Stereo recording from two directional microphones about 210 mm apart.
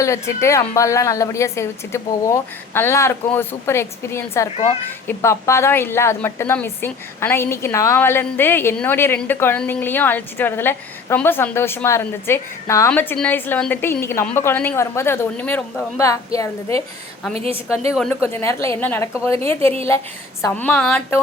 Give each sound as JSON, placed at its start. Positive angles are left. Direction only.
{"t": 0.0, "sound": "speech", "side_deg": 15}
{"t": 17.3, "sound": "a woman's voice", "side_deg": -30}
{"t": 18.1, "sound": "speech", "side_deg": 10}
{"t": 20.4, "sound": "speech", "side_deg": 5}